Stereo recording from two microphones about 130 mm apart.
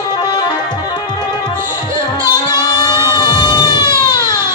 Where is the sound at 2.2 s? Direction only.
35° left (ahead or behind).